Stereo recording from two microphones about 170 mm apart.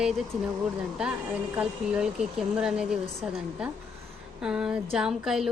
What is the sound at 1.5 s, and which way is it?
A woman's voice, 5° right (ahead or behind).